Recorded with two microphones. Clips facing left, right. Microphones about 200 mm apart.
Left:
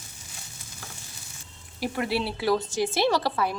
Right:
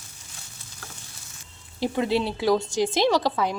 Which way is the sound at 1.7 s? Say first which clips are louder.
Right 4 dB; 20° right (ahead or behind).